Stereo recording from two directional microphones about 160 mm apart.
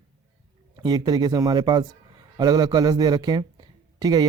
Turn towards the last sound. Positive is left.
turn(degrees=-25)  # may be behind; listen again after turning